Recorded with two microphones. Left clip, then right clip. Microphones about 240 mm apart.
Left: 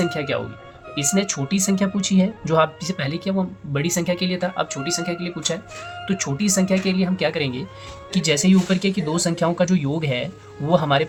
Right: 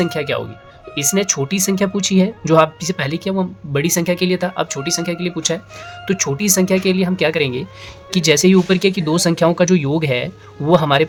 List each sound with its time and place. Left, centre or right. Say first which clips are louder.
0.0 s speech: right 4 dB; right